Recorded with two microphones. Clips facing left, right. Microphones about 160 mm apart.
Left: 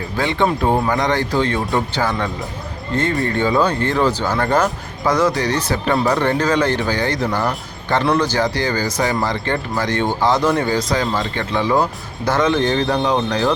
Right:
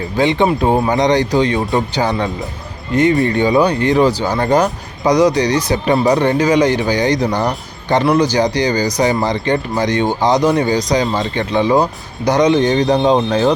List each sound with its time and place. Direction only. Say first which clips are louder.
0.2 s speech: right 4 dB; 20° right (ahead or behind)